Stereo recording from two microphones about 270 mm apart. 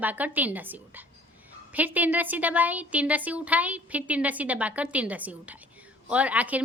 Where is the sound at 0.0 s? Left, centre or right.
Centre.